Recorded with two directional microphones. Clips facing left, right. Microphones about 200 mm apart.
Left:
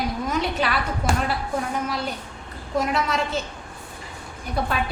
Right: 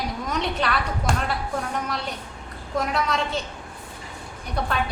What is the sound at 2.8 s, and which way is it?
Speech, centre (ahead or behind).